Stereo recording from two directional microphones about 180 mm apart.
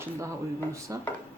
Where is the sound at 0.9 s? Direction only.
20° right (ahead or behind).